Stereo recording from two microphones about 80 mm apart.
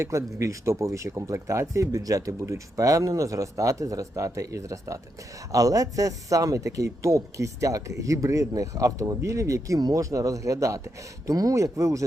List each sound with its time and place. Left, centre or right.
0.0 s a man's voice: right